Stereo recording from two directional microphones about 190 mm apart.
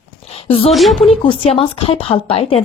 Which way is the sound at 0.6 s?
Centre (ahead or behind).